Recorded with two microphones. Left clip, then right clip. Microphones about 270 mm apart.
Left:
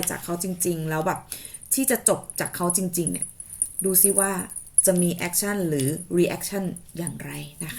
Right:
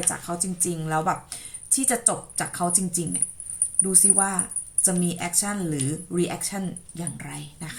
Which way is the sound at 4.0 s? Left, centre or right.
Centre.